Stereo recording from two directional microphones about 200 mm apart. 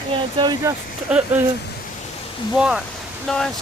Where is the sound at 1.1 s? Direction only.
5° right (ahead or behind).